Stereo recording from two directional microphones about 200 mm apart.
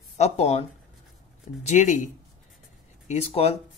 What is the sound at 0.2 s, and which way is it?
Speech, 30° left (ahead or behind).